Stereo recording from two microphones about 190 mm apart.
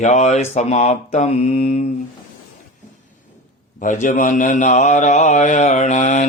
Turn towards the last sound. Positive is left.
turn(degrees=40)  # may be behind; listen again after turning